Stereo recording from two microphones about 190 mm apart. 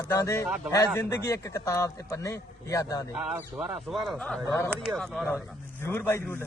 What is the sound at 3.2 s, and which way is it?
Speech, 10° right (ahead or behind).